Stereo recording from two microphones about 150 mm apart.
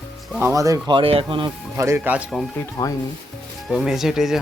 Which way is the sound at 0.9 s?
40° right (ahead or behind).